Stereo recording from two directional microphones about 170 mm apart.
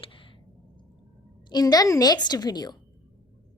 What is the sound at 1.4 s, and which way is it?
A woman's voice, 25° left (ahead or behind).